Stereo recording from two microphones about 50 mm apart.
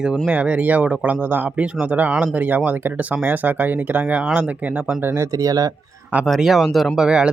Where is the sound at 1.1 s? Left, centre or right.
Right.